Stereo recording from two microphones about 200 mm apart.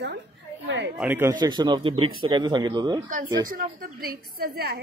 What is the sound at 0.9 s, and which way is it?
Speech, 10° right (ahead or behind).